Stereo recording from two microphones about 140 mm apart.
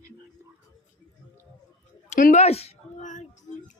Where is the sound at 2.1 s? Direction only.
65° left (ahead or behind).